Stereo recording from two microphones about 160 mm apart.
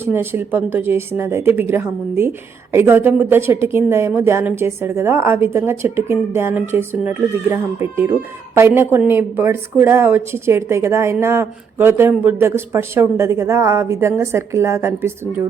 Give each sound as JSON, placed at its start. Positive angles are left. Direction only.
{"t": 0.0, "sound": "speech", "side_deg": -15}